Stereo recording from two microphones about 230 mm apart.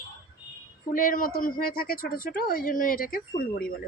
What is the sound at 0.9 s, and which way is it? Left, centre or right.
Speech, left.